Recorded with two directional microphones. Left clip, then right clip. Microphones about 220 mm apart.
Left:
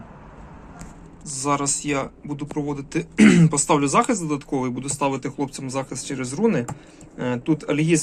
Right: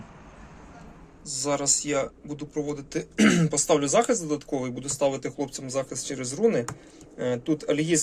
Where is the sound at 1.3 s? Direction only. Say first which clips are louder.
Left 3 dB; centre (ahead or behind).